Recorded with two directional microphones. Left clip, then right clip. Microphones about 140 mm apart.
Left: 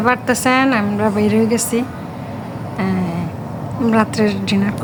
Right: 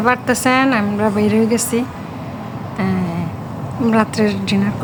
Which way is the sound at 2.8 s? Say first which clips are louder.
Even; centre (ahead or behind).